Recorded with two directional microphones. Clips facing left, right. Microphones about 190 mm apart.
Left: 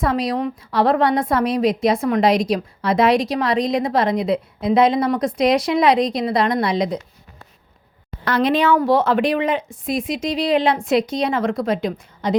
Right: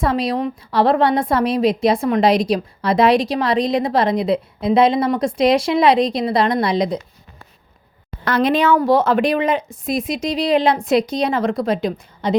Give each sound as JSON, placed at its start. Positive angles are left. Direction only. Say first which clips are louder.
{"t": 0.0, "sound": "a woman's voice", "louder": "right 1 dB", "side_deg": -30}
{"t": 8.2, "sound": "a woman's voice", "louder": "right 1 dB", "side_deg": -50}